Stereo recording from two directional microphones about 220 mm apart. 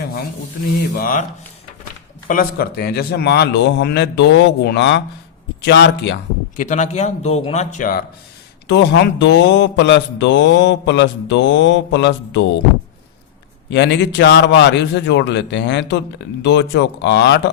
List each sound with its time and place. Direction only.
0.9 s speech: 40° left (ahead or behind)
2.2 s speech: 40° left (ahead or behind)
6.6 s speech: 35° left (ahead or behind)
8.6 s speech: 50° left (ahead or behind)
13.7 s speech: 50° left (ahead or behind)